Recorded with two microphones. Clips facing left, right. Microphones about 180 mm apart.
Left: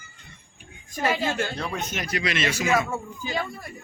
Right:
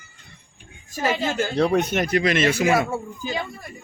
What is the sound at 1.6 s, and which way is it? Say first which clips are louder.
Speech: right 11 dB; 65° right (ahead or behind).